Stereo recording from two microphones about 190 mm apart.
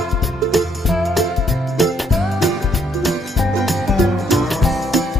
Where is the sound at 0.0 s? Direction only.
Centre (ahead or behind).